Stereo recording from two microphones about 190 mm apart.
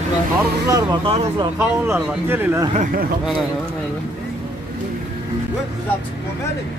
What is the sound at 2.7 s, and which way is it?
Speech, 45° right (ahead or behind).